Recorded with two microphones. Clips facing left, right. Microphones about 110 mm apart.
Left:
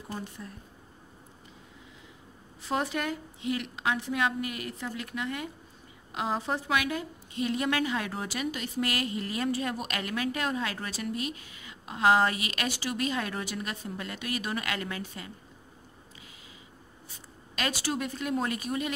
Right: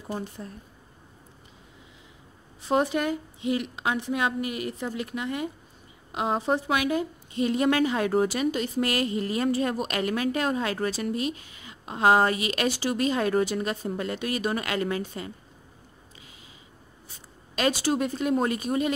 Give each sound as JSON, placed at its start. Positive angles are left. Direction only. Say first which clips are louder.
{"t": 2.7, "sound": "a woman's voice", "louder": "right 6 dB", "side_deg": -20}
{"t": 17.6, "sound": "a woman's voice", "louder": "right 7 dB", "side_deg": -25}